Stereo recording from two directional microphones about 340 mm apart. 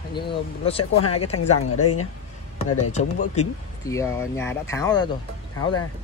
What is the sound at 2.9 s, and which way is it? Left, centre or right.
Speech, left.